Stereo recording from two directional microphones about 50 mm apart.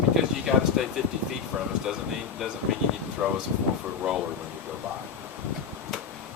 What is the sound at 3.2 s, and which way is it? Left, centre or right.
Speech, right.